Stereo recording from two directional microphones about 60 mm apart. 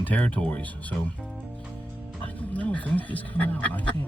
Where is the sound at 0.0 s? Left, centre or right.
Left.